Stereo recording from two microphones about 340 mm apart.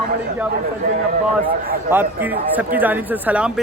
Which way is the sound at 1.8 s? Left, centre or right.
Centre.